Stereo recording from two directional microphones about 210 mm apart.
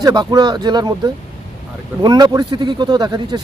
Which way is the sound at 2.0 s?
20° right (ahead or behind).